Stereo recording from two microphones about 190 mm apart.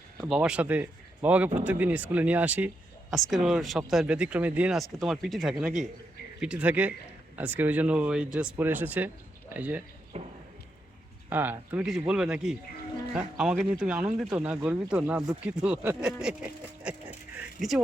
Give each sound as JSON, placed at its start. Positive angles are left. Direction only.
{"t": 0.3, "sound": "speech", "side_deg": -5}
{"t": 10.1, "sound": "speech", "side_deg": -35}
{"t": 11.3, "sound": "speech", "side_deg": -10}